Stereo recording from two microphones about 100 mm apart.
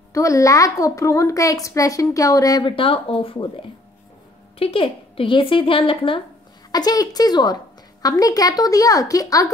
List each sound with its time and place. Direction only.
0.1 s a woman's voice: 30° left (ahead or behind)
2.6 s a woman's voice: 60° left (ahead or behind)
6.7 s a woman's voice: 40° left (ahead or behind)